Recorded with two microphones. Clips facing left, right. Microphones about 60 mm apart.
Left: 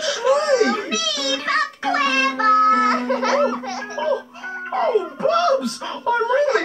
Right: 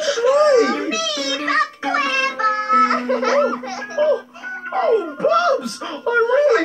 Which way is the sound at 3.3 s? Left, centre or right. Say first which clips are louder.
Right 1 dB; centre.